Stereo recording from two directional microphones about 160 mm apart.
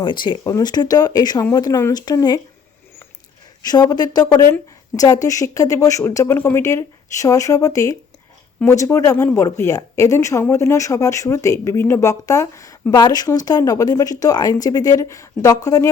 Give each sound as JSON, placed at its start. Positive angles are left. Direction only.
{"t": 0.0, "sound": "a woman's voice", "side_deg": 30}
{"t": 3.6, "sound": "a woman's voice", "side_deg": 25}